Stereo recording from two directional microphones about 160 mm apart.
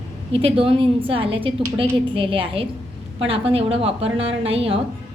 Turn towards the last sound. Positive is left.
turn(degrees=-40)  # may be behind; listen again after turning